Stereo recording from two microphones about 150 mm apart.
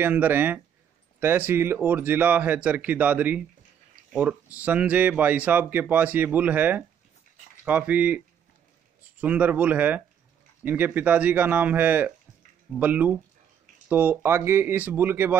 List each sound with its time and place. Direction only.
0.0 s speech: 10° right (ahead or behind)
9.2 s speech: 10° right (ahead or behind)